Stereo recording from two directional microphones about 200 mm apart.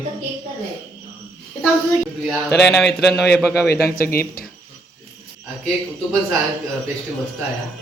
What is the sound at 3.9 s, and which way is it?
Speech, 50° left (ahead or behind).